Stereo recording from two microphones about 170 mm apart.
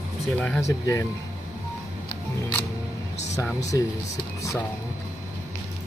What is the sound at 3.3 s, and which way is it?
Speech, 15° left (ahead or behind).